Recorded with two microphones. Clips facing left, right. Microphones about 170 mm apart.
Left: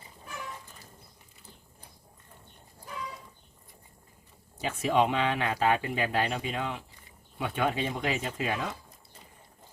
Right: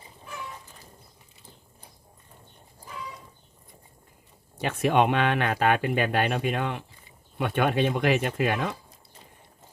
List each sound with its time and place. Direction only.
4.6 s speech: 65° right (ahead or behind)